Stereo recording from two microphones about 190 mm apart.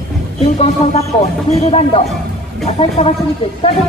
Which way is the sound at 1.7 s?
30° left (ahead or behind).